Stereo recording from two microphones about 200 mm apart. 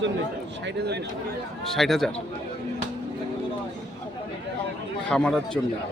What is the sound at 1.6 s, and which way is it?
Speech, centre (ahead or behind).